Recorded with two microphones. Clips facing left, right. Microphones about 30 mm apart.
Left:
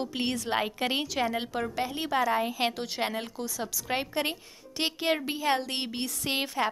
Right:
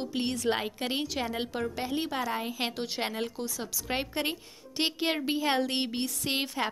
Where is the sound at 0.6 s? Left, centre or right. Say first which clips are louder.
Left 3 dB; centre.